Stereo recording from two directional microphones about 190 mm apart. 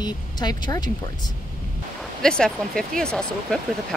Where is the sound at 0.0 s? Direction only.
20° left (ahead or behind).